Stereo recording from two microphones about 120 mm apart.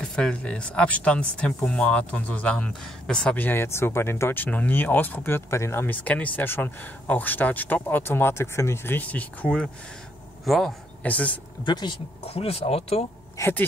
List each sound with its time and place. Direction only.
0.0 s a man's voice: 5° left (ahead or behind)
11.0 s speech: 10° left (ahead or behind)
11.6 s speech: 40° left (ahead or behind)
12.2 s speech: 55° left (ahead or behind)
13.4 s speech: 15° left (ahead or behind)